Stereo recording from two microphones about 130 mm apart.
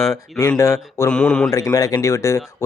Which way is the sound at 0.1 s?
25° left (ahead or behind).